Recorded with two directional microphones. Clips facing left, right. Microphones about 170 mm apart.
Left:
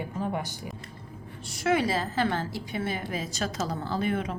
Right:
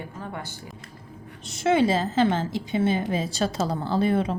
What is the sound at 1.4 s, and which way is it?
A woman's voice, 25° right (ahead or behind).